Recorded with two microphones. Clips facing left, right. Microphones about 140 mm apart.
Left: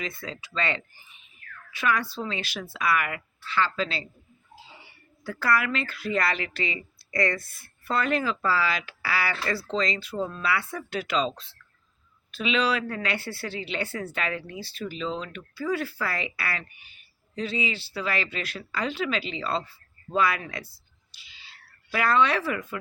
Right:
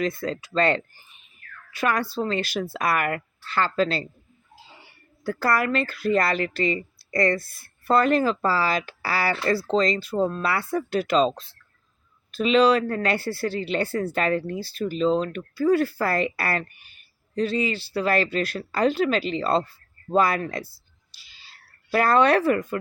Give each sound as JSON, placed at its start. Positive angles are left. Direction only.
{"t": 0.0, "sound": "speech", "side_deg": -45}
{"t": 5.2, "sound": "speech", "side_deg": -45}